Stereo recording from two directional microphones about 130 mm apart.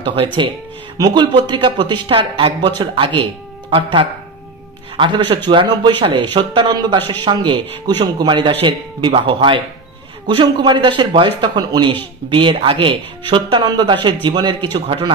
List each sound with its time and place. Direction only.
0.0 s speech: 40° right (ahead or behind)